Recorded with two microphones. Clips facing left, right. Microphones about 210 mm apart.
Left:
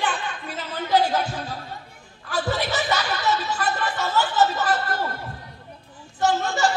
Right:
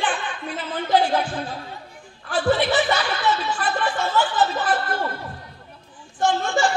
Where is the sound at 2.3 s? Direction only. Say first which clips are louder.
Right 5 dB; 40° left (ahead or behind).